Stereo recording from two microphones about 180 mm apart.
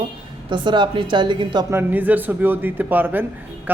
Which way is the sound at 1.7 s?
10° right (ahead or behind).